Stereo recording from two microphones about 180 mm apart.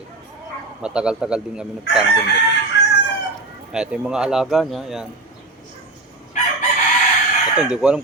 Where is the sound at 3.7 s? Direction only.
5° right (ahead or behind).